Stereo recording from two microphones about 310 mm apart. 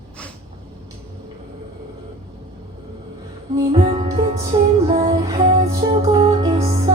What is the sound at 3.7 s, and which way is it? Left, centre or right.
Music, centre.